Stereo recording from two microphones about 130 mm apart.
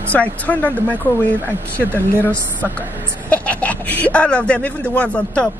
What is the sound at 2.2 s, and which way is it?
Speech, 10° left (ahead or behind).